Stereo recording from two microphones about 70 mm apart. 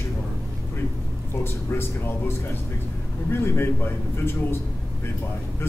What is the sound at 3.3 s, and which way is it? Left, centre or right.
Speech, left.